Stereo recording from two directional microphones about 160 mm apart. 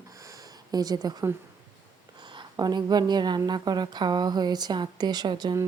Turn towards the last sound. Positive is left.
turn(degrees=-25)  # may be behind; listen again after turning